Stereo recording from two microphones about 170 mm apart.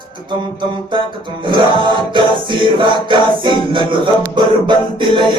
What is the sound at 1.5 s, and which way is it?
Music, 30° right (ahead or behind).